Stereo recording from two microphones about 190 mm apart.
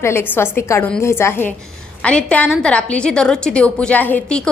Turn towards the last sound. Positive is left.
turn(degrees=5)  # may be behind; listen again after turning